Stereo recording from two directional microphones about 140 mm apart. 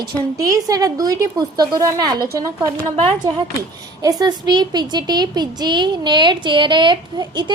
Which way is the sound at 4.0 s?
30° right (ahead or behind).